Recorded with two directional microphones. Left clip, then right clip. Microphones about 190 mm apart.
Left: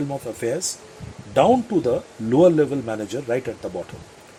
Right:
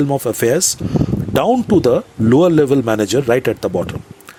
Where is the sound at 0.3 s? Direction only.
45° right (ahead or behind).